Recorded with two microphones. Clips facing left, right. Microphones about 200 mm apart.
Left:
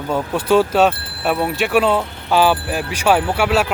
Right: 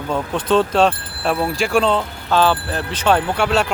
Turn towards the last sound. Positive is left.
turn(degrees=5)  # may be behind; listen again after turning